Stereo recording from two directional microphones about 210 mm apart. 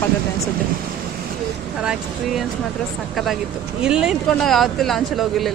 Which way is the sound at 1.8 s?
Centre (ahead or behind).